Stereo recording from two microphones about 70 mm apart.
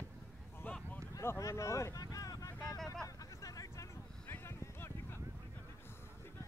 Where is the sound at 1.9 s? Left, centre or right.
Left.